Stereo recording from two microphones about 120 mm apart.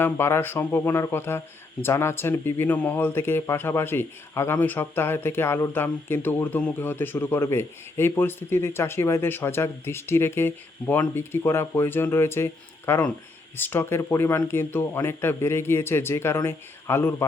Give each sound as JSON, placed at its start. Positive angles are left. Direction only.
{"t": 0.0, "sound": "speech", "side_deg": 20}